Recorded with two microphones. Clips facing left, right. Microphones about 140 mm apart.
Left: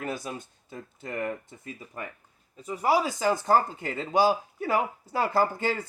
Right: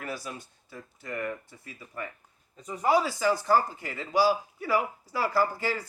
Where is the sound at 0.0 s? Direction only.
20° left (ahead or behind).